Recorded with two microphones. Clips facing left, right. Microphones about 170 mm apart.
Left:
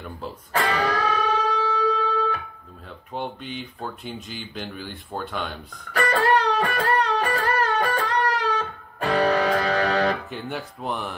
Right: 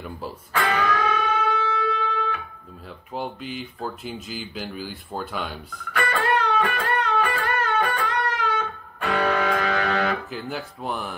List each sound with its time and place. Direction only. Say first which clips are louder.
0.5 s music: even; 35° left (ahead or behind)
3.2 s speech: right 1 dB; 5° right (ahead or behind)
5.9 s music: left 3 dB; 35° left (ahead or behind)
10.3 s speech: even; centre (ahead or behind)